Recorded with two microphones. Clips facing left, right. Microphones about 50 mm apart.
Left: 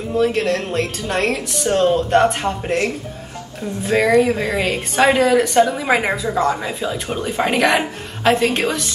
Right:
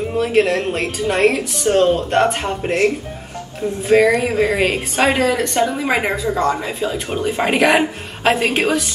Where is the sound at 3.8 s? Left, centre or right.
Centre.